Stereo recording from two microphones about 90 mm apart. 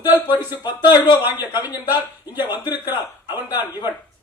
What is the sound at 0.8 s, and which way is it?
Speech, 55° left (ahead or behind).